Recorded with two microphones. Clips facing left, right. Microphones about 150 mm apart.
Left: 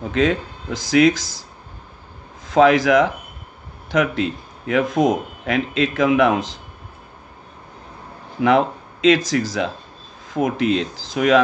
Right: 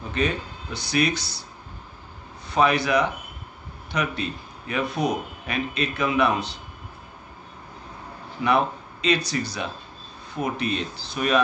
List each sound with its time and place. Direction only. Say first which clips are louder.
0.0 s speech: left 7 dB; 90° left
2.4 s a man's voice: left 8 dB; 90° left
8.4 s speech: left 6 dB; 90° left